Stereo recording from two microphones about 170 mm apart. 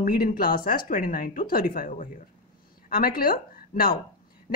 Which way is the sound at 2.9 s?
60° left (ahead or behind).